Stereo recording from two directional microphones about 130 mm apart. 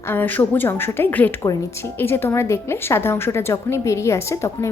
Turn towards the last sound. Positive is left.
turn(degrees=20)  # may be behind; listen again after turning